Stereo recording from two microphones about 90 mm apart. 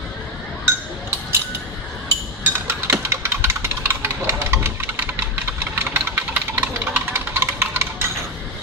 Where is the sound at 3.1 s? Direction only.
25° right (ahead or behind).